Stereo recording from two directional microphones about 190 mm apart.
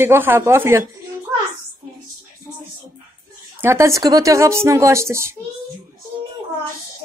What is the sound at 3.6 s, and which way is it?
A woman's voice, 15° right (ahead or behind).